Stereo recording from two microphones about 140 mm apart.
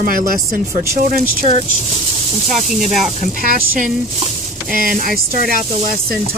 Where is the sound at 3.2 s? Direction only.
90° right.